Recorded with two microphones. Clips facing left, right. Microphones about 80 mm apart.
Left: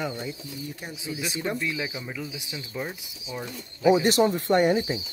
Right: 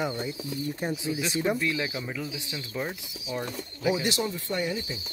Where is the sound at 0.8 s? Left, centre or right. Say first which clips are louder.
Right 6 dB; right.